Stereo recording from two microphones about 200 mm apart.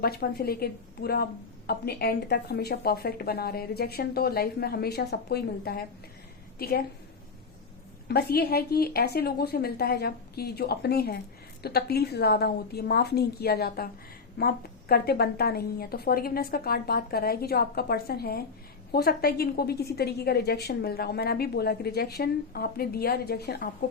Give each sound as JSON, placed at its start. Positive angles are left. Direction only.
{"t": 0.0, "sound": "a woman's voice", "side_deg": 50}
{"t": 8.0, "sound": "a woman's voice", "side_deg": 50}